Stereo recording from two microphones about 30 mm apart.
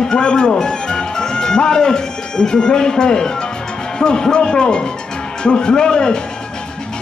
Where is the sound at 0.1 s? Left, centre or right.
Left.